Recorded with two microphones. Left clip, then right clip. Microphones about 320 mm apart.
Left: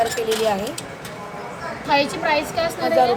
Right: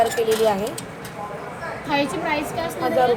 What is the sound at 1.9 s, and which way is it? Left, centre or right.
Speech, left.